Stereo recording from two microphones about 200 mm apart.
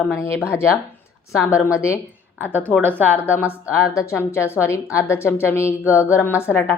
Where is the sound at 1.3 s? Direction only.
15° left (ahead or behind).